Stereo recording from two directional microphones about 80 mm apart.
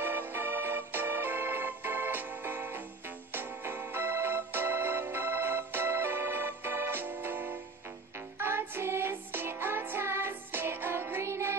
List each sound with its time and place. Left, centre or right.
0.0 s music: right